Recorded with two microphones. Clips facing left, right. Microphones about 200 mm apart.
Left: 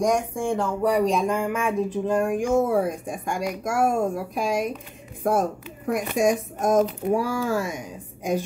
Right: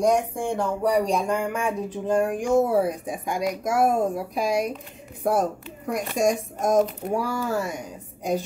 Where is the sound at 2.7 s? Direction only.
5° right (ahead or behind).